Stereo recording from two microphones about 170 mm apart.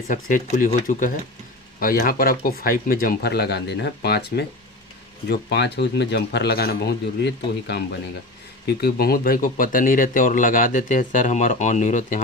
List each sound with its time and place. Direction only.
0.1 s a man's voice: 50° left (ahead or behind); by 7.8 s 85° left
8.6 s speech: 65° left (ahead or behind); by 12.2 s 45° left (ahead or behind)